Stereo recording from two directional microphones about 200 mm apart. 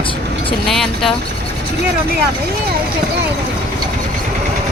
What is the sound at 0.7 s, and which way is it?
Speech, centre (ahead or behind).